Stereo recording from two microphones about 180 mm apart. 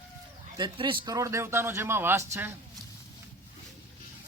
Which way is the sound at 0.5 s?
25° right (ahead or behind).